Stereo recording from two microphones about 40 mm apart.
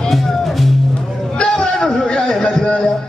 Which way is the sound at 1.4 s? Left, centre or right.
Left.